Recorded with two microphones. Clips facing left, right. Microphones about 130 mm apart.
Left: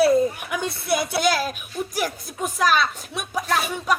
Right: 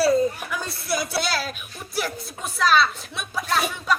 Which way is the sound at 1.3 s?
45° left (ahead or behind).